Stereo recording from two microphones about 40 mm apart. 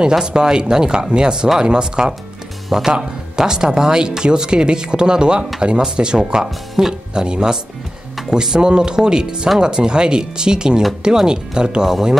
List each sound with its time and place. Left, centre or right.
0.1 s speech: centre